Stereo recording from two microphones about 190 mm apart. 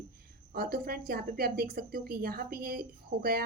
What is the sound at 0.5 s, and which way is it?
Speech, 50° right (ahead or behind).